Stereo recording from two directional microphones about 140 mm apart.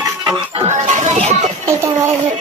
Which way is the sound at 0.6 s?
60° right (ahead or behind).